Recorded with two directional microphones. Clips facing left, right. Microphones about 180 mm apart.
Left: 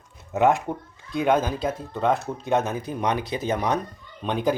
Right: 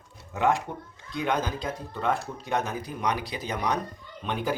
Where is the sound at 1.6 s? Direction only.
20° left (ahead or behind).